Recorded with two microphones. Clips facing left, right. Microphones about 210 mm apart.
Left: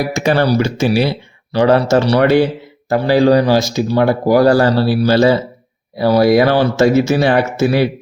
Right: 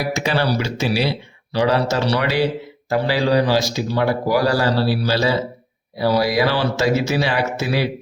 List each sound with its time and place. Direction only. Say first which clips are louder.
0.1 s speech: left 6 dB; 50° left (ahead or behind)